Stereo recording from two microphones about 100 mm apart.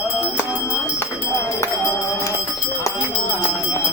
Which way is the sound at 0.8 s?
30° left (ahead or behind).